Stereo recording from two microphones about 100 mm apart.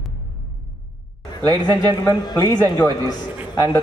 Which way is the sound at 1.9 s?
45° left (ahead or behind).